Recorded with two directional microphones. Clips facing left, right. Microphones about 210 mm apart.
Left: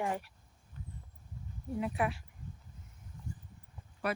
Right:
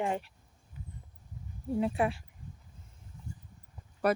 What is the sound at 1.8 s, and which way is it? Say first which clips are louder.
Speech: right 4 dB; 30° right (ahead or behind).